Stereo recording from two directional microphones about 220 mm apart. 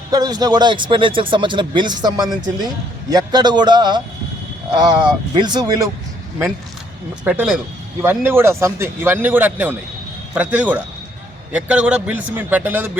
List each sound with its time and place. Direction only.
0.1 s speech: 20° right (ahead or behind)
7.3 s a man's voice: 5° right (ahead or behind)